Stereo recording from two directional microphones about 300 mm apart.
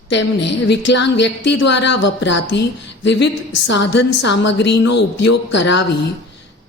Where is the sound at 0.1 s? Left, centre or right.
Left.